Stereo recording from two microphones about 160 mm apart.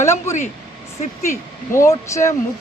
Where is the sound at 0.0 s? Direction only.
15° left (ahead or behind).